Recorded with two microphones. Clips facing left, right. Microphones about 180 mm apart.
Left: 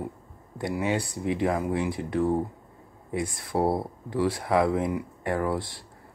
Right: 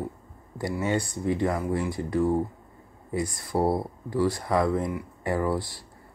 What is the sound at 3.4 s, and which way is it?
Speech, centre (ahead or behind).